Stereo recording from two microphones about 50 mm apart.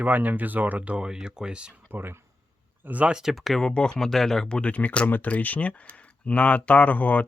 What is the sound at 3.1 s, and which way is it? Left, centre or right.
Speech, centre.